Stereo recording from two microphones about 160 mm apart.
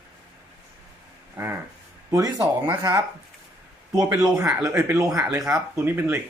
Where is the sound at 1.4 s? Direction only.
15° right (ahead or behind).